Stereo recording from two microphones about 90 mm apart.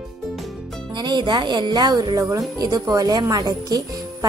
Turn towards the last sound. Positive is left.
turn(degrees=-45)  # may be behind; listen again after turning